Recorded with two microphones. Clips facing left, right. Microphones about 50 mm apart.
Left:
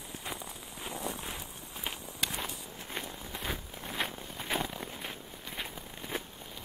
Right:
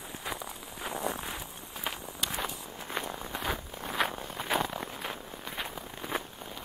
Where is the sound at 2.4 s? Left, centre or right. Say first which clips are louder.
Right 4 dB; right.